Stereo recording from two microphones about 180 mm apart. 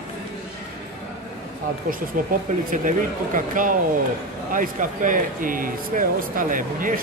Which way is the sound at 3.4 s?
50° right (ahead or behind).